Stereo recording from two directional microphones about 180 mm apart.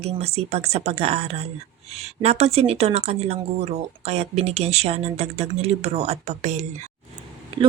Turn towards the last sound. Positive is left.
turn(degrees=-30)  # may be behind; listen again after turning